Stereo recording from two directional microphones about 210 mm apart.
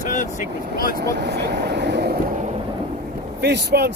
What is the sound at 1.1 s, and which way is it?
Vehicle, 50° right (ahead or behind).